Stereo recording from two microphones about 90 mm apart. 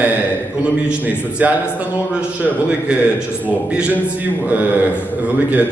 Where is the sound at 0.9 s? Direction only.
15° right (ahead or behind).